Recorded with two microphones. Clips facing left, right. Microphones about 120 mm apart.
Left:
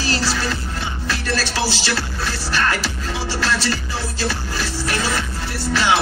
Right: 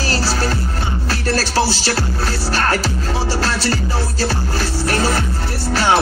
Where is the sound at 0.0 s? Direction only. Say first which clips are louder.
Right 2 dB; 40° right (ahead or behind).